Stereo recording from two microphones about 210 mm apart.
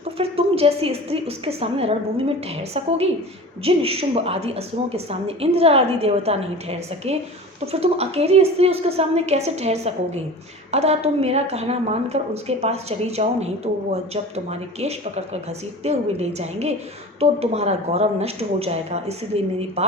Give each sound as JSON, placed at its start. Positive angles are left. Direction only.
{"t": 0.2, "sound": "a woman's voice", "side_deg": -30}
{"t": 3.6, "sound": "a woman's voice", "side_deg": -30}